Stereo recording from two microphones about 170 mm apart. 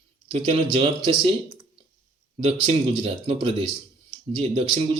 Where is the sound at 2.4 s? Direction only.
40° right (ahead or behind).